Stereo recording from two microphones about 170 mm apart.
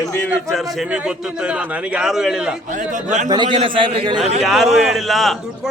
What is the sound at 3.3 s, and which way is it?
Speech, 25° right (ahead or behind).